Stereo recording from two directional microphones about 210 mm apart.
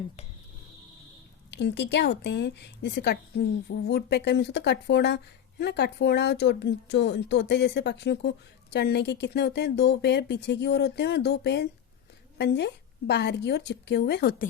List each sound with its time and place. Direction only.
1.5 s a woman's voice: 55° left (ahead or behind)